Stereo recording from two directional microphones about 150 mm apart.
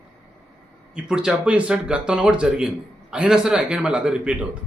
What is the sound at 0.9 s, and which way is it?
A man's voice, 5° right (ahead or behind).